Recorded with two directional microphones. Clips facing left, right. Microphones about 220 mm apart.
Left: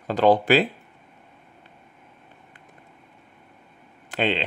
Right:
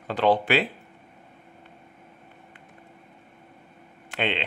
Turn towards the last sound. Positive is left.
turn(degrees=40)  # may be behind; listen again after turning